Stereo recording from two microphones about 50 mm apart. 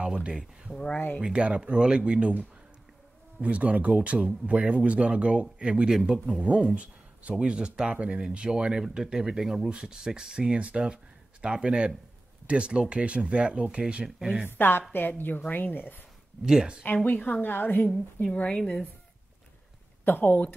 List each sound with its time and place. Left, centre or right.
0.0 s speech: centre
0.9 s a woman's voice: left
1.2 s speech: centre
6.1 s speech: centre
6.4 s speech: right; by 9.7 s centre
9.7 s speech: centre
14.0 s speech: centre
14.6 s a woman's voice: left
16.4 s speech: centre
16.8 s a woman's voice: left
17.5 s a woman's voice: left
17.8 s a woman's voice: centre
18.3 s a woman's voice: left
20.1 s a woman's voice: left